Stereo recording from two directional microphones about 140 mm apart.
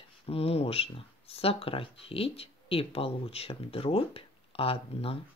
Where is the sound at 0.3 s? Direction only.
45° left (ahead or behind).